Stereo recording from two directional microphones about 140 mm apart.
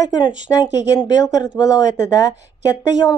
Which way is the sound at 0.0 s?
30° left (ahead or behind).